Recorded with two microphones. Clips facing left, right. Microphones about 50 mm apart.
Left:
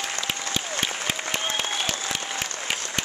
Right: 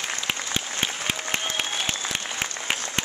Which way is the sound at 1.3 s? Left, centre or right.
Right.